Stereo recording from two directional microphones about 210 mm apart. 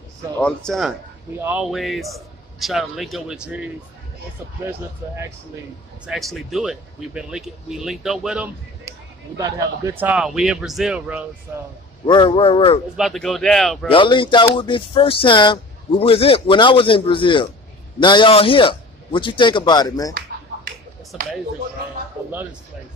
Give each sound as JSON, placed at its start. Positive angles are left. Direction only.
{"t": 0.4, "sound": "speech", "side_deg": 5}
{"t": 4.6, "sound": "speech", "side_deg": -10}
{"t": 6.0, "sound": "speech", "side_deg": 0}
{"t": 9.4, "sound": "speech", "side_deg": -15}
{"t": 12.1, "sound": "speech", "side_deg": 25}
{"t": 12.9, "sound": "speech", "side_deg": 0}
{"t": 13.8, "sound": "speech", "side_deg": 25}
{"t": 21.1, "sound": "speech", "side_deg": 0}